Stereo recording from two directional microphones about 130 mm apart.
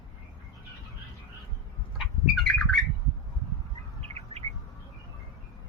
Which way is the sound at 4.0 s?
50° right (ahead or behind).